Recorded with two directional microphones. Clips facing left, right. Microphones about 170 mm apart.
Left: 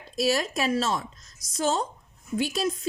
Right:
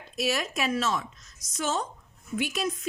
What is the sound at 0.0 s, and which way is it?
A woman's voice, 35° left (ahead or behind).